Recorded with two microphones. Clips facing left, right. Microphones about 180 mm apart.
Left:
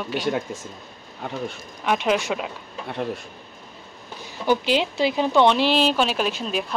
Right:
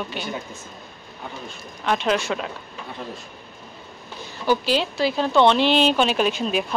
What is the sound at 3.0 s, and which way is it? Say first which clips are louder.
Speech: left 7 dB; 55° left (ahead or behind).